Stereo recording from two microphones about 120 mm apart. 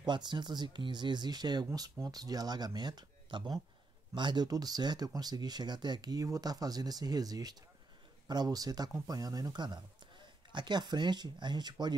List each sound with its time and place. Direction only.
0.0 s speech: 40° right (ahead or behind)